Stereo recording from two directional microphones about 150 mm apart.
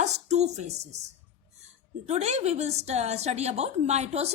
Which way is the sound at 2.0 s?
45° right (ahead or behind).